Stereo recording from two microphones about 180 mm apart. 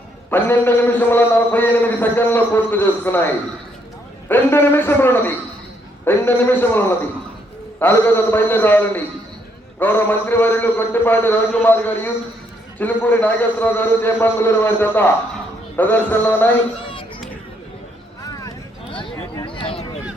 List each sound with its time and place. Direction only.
0.3 s a man's voice: 10° left (ahead or behind)
4.3 s a man's voice: 10° left (ahead or behind)
18.2 s a sound: 20° left (ahead or behind)